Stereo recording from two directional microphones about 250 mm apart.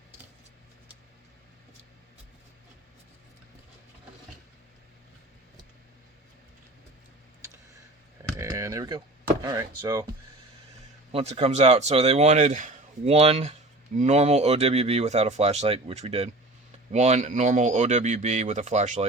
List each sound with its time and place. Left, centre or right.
8.4 s computer keyboard: centre
9.4 s speech: centre
11.1 s speech: right